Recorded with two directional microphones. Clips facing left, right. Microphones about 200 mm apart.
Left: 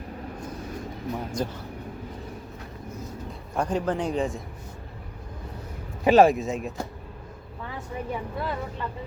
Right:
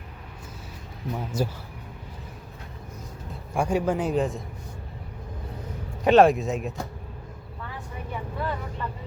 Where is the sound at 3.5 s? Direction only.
10° right (ahead or behind).